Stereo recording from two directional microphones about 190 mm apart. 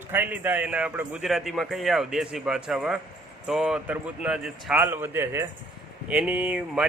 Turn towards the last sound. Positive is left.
turn(degrees=-5)  # may be behind; listen again after turning